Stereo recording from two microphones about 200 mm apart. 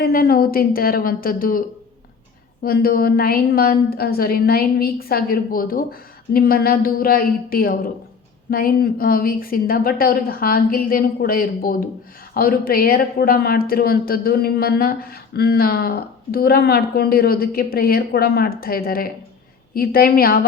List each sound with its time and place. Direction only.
0.0 s a woman's voice: 50° left (ahead or behind)
2.6 s a woman's voice: 50° left (ahead or behind)